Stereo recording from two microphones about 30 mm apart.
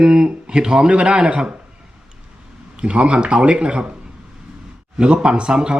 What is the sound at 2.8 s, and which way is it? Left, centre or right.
A man's voice, right.